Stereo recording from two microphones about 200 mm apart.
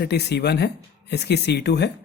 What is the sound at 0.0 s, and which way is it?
Speech, 55° left (ahead or behind).